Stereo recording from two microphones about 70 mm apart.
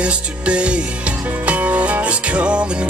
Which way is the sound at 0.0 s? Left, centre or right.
Centre.